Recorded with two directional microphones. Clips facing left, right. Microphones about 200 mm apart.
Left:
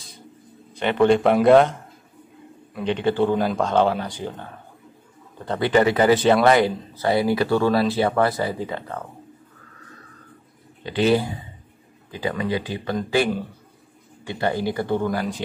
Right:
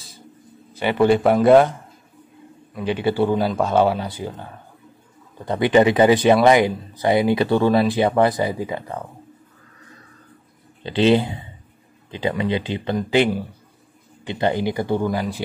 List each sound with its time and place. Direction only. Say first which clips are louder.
0.7 s speech: right 1 dB; 5° right (ahead or behind)
2.7 s speech: right 1 dB; 5° right (ahead or behind)
10.8 s speech: right 3 dB; 25° right (ahead or behind); by 15.4 s 10° right (ahead or behind)